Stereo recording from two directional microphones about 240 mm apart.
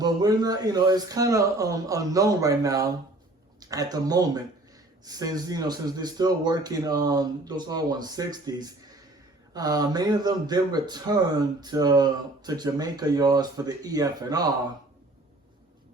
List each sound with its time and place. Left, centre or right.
0.0 s speech: centre